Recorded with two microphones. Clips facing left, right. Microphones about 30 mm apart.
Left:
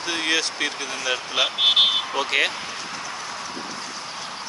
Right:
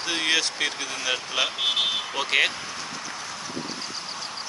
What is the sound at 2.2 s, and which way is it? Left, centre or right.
Speech, centre.